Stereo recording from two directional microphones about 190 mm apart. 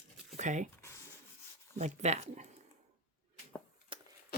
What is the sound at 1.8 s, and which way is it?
Speech, 35° right (ahead or behind).